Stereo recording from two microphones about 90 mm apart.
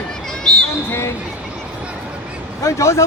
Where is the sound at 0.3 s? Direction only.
10° left (ahead or behind).